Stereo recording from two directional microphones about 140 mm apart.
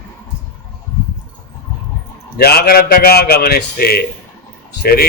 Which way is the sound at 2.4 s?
90° left.